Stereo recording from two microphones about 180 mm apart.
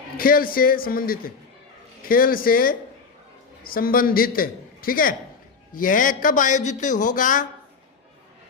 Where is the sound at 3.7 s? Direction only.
55° left (ahead or behind).